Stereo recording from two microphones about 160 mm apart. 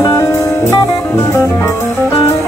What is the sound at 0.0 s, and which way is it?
Jazz, 15° left (ahead or behind).